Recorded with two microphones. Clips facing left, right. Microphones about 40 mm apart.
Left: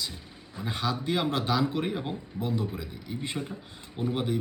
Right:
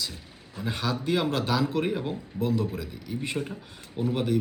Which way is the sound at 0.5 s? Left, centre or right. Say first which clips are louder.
Right 1 dB; centre.